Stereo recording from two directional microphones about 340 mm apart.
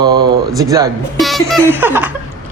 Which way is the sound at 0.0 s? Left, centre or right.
Centre.